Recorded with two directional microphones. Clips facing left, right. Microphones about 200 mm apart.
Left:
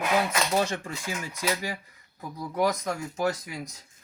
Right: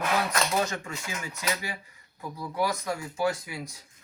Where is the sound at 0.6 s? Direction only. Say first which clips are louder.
Left 2 dB; 30° left (ahead or behind).